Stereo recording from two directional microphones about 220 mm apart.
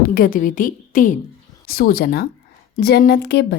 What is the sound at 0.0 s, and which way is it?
A woman's voice, 40° left (ahead or behind).